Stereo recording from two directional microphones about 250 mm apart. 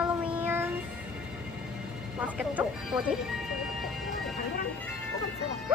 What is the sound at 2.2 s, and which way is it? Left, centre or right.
Speech, centre.